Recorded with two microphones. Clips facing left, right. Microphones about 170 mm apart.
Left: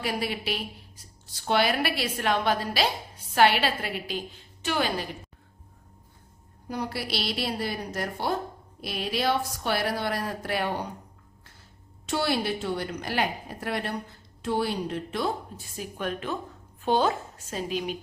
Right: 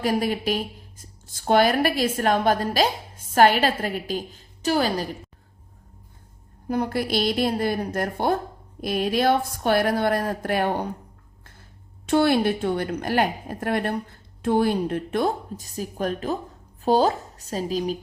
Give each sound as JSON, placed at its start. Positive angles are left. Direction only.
{"t": 0.0, "sound": "a woman's voice", "side_deg": -45}
{"t": 6.7, "sound": "a woman's voice", "side_deg": -50}
{"t": 12.0, "sound": "a woman's voice", "side_deg": -55}